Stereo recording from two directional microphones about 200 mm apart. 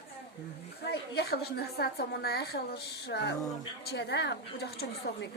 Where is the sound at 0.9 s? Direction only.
55° left (ahead or behind).